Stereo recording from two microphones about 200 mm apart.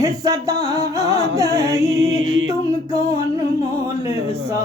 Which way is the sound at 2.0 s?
75° right (ahead or behind).